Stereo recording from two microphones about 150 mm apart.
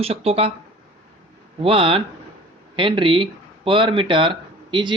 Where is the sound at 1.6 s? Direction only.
35° right (ahead or behind).